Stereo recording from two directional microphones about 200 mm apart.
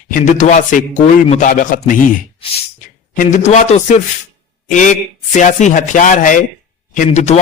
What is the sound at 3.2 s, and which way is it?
Speech, 40° left (ahead or behind).